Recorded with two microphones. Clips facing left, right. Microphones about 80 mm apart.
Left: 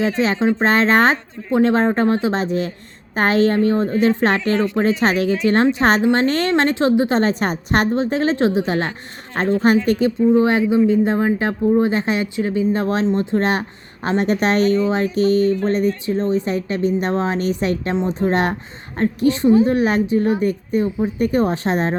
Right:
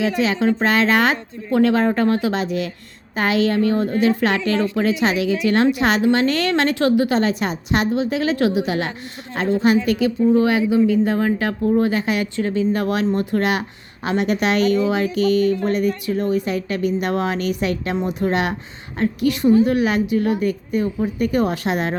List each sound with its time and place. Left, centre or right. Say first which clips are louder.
0.0 s a woman's voice: left 1 dB; left
12.4 s speech: left 1 dB; centre
12.7 s a woman's voice: left 1 dB; left